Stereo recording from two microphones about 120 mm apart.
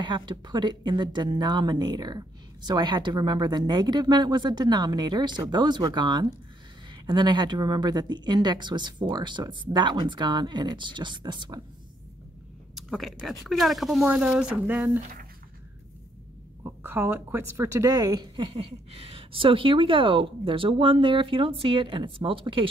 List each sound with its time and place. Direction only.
0.0 s speech: 40° right (ahead or behind)
12.7 s speech: centre (ahead or behind)
16.6 s a woman's voice: 20° right (ahead or behind)
17.8 s a woman's voice: 30° right (ahead or behind)